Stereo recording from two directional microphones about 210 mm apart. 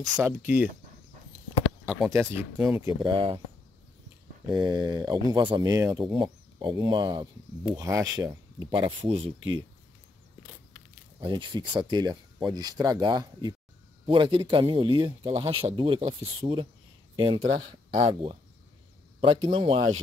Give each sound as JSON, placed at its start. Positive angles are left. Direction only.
{"t": 0.1, "sound": "speech", "side_deg": -10}
{"t": 2.0, "sound": "speech", "side_deg": -10}
{"t": 4.6, "sound": "speech", "side_deg": -20}
{"t": 6.2, "sound": "speech", "side_deg": -20}
{"t": 11.1, "sound": "speech", "side_deg": -20}